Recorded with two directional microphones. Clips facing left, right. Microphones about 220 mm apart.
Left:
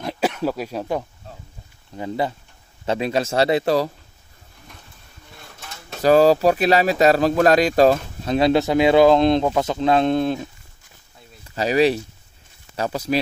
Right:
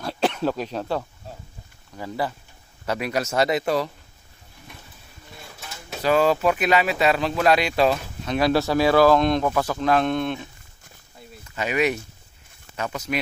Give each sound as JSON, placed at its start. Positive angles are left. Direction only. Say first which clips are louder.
{"t": 0.0, "sound": "a sound", "louder": "left 1 dB", "side_deg": 10}
{"t": 2.0, "sound": "speech", "louder": "left 4 dB", "side_deg": 20}
{"t": 5.4, "sound": "a sound", "louder": "even", "side_deg": 0}
{"t": 6.0, "sound": "speech", "louder": "left 5 dB", "side_deg": 35}
{"t": 8.4, "sound": "speech", "louder": "left 3 dB", "side_deg": 20}
{"t": 11.4, "sound": "speech", "louder": "left 5 dB", "side_deg": 35}